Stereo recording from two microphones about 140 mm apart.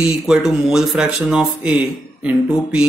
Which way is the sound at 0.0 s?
5° right (ahead or behind).